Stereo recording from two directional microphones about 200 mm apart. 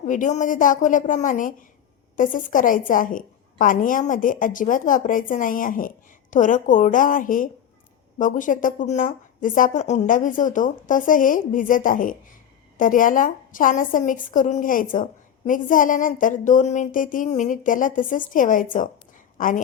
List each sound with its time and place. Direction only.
0.0 s a woman's voice: 40° left (ahead or behind)